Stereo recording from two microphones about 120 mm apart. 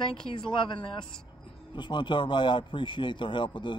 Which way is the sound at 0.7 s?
40° left (ahead or behind).